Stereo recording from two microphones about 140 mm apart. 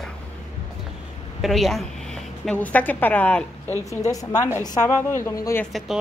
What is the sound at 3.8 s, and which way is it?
A woman's voice, 25° left (ahead or behind).